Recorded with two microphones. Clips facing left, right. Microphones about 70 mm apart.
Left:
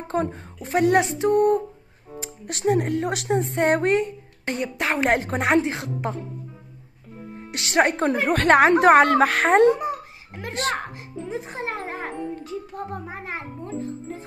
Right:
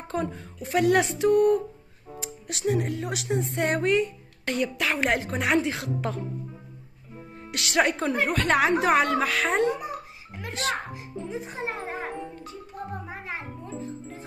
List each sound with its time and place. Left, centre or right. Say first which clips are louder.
0.1 s speech: left 4 dB; left
2.4 s speech: left 5 dB; left
7.5 s speech: left 3 dB; left
8.3 s a woman's voice: left 8 dB; left
11.2 s wind chime: left 3 dB; left
13.1 s a woman's voice: left 3 dB; left